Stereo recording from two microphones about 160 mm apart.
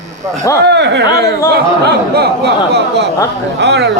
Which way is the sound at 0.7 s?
90° right.